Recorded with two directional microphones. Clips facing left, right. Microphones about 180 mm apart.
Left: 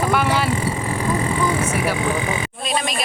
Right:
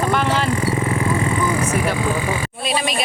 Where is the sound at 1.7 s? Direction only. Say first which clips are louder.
Right 1 dB; 15° left (ahead or behind).